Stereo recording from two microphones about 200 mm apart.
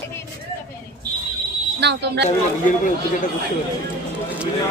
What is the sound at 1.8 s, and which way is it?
Speech, 55° right (ahead or behind).